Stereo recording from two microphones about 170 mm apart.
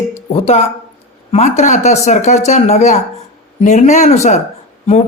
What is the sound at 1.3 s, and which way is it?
A woman's voice, 40° left (ahead or behind).